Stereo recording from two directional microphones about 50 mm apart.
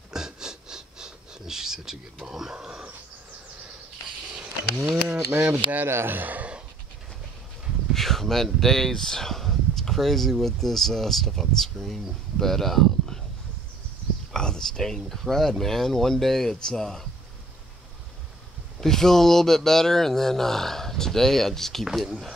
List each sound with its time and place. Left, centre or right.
0.1 s a sound: centre
5.4 s speech: right
5.9 s speech: right
7.9 s speech: centre
14.3 s speech: centre
18.8 s speech: centre
21.8 s speech: centre